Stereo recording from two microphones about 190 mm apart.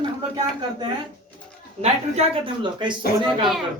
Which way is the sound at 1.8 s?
30° right (ahead or behind).